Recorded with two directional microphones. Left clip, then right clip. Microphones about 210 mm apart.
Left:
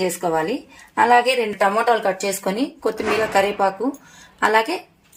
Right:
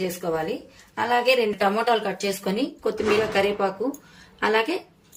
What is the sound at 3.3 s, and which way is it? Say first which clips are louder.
Speech: left 5 dB; 30° left (ahead or behind).